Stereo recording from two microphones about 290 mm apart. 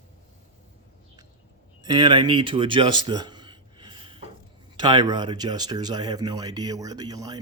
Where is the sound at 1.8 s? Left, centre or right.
Centre.